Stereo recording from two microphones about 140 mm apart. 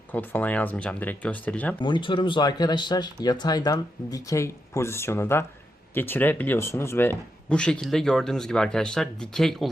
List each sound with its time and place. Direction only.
0.1 s speech: 10° left (ahead or behind)
1.8 s speech: 35° left (ahead or behind); by 9.6 s 5° left (ahead or behind)